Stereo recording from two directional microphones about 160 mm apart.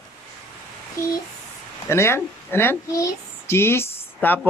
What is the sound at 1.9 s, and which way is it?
A woman's voice, 15° left (ahead or behind).